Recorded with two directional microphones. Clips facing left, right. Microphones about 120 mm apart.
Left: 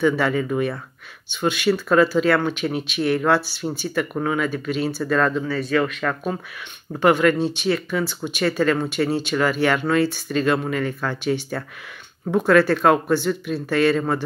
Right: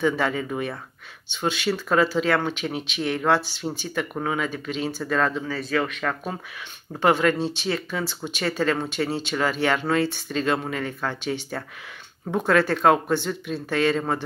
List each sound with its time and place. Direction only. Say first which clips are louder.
0.4 s speech: left 6 dB; 25° right (ahead or behind)
7.0 s speech: left 3 dB; 30° right (ahead or behind)